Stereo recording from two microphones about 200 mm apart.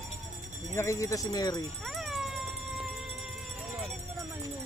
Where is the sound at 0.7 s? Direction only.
15° left (ahead or behind).